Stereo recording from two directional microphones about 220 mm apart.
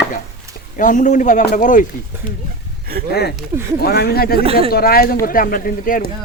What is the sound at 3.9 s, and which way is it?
Speech, 45° left (ahead or behind).